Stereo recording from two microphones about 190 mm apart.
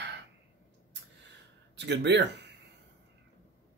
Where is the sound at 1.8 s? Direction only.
65° right (ahead or behind).